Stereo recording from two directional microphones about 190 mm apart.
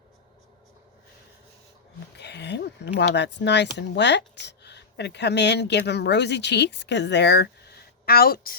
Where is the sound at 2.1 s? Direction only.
65° left (ahead or behind).